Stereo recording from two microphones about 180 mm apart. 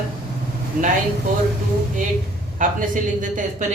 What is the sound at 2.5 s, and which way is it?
A woman's voice, 45° right (ahead or behind).